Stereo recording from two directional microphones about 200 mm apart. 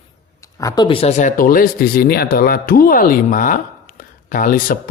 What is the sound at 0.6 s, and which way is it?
Speech, 25° left (ahead or behind).